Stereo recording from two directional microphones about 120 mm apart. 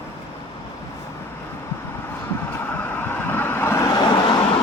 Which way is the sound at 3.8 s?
35° left (ahead or behind).